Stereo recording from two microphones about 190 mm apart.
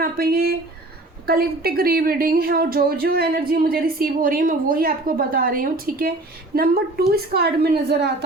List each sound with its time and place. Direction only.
0.0 s a woman's voice: 50° right (ahead or behind)